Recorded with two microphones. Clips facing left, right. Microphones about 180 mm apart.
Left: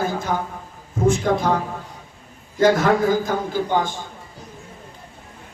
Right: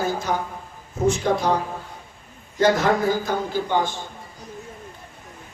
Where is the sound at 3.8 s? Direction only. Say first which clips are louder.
Even; 45° left (ahead or behind).